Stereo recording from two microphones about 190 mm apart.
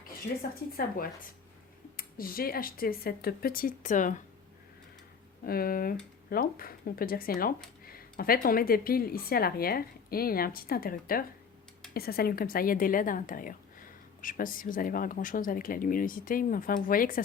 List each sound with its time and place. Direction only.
0.7 s a woman's voice: 50° left (ahead or behind)
5.5 s a woman's voice: 50° left (ahead or behind)